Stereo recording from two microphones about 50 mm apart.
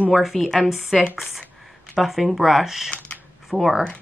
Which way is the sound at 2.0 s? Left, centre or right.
Centre.